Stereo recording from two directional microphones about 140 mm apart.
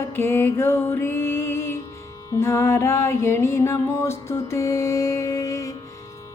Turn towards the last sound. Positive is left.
turn(degrees=25)  # may be behind; listen again after turning